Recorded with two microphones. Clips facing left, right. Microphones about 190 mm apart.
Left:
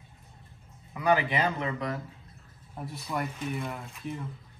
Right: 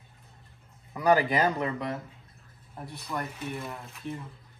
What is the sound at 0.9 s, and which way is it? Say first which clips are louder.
Speech: right 3 dB; 40° right (ahead or behind).